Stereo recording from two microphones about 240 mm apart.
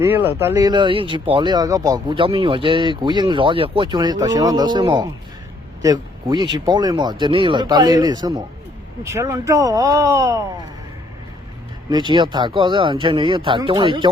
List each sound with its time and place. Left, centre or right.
0.0 s speech: centre
11.9 s speech: centre